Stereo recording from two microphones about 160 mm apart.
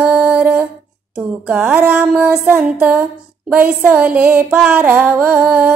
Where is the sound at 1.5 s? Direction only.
10° right (ahead or behind).